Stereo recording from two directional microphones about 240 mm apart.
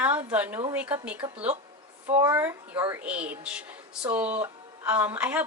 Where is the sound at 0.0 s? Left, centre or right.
Centre.